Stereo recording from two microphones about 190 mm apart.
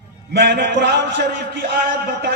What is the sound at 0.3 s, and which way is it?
A man's voice, 65° right (ahead or behind).